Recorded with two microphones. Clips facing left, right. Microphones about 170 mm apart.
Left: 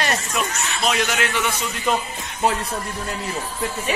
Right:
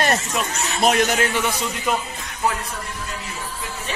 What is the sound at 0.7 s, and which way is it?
Speech, 50° right (ahead or behind).